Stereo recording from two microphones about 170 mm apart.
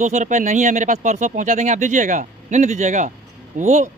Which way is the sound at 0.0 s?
45° right (ahead or behind).